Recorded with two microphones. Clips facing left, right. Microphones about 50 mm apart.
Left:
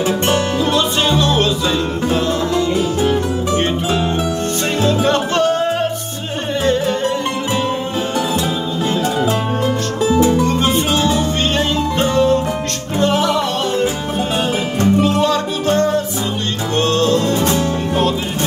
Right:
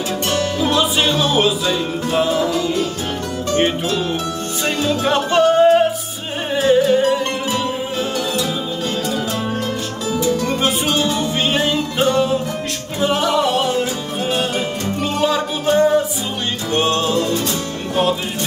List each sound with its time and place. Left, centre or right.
0.6 s music: centre
4.8 s music: centre
10.1 s music: left
11.0 s music: centre
15.0 s music: centre